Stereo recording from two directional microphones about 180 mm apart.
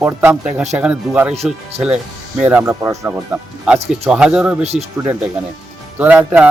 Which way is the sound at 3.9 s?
5° right (ahead or behind).